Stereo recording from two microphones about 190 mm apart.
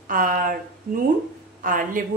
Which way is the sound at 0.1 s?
45° right (ahead or behind).